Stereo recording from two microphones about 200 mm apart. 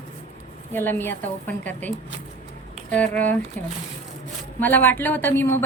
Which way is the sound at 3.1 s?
10° left (ahead or behind).